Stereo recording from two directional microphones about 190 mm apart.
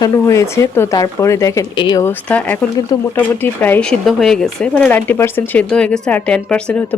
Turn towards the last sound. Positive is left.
turn(degrees=5)  # may be behind; listen again after turning